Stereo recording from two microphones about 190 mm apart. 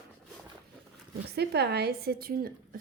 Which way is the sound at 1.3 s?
60° right (ahead or behind).